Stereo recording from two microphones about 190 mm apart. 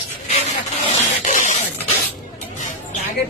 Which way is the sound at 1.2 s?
40° left (ahead or behind).